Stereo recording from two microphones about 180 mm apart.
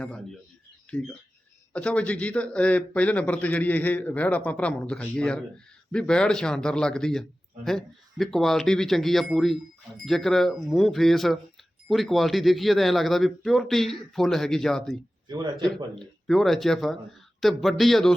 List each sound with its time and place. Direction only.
0.0 s a man's voice: 5° left (ahead or behind)
15.3 s speech: 25° right (ahead or behind)
16.0 s a man's voice: centre (ahead or behind)